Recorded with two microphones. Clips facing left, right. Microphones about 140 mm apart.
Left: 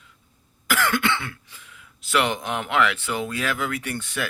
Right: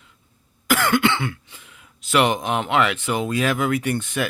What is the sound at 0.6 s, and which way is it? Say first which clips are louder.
Speech: right 4 dB; 20° right (ahead or behind).